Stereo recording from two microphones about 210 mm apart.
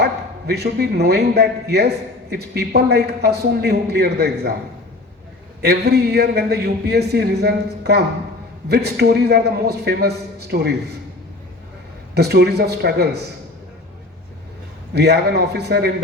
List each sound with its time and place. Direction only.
0.0 s a man's voice: 50° right (ahead or behind)
5.6 s a man's voice: 50° right (ahead or behind)
12.1 s a man's voice: 50° right (ahead or behind)
14.9 s a man's voice: 50° right (ahead or behind)